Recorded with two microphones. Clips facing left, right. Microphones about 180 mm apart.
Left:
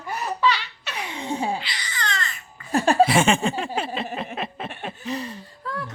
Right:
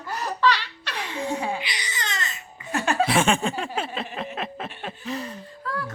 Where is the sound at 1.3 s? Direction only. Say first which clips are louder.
Left 2 dB; 30° left (ahead or behind).